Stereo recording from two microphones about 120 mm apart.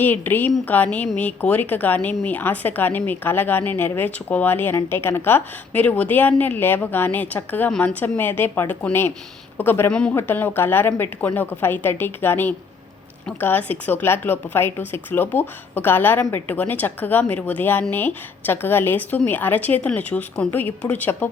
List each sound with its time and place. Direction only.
0.0 s a woman's voice: 15° left (ahead or behind)
9.9 s a woman's voice: 5° left (ahead or behind)